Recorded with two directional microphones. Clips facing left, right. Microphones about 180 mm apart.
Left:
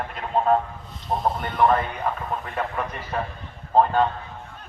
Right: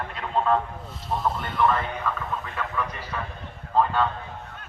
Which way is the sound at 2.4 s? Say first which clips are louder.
Left 2 dB; 40° left (ahead or behind).